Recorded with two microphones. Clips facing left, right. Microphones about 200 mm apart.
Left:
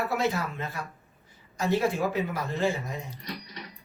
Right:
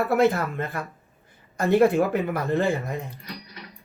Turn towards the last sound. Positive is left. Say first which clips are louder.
# right 3 dB
turn(degrees=-55)  # may be behind; listen again after turning